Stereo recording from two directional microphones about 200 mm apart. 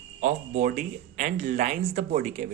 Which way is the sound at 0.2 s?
40° right (ahead or behind).